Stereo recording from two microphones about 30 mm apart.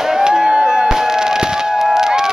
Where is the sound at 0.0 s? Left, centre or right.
Right.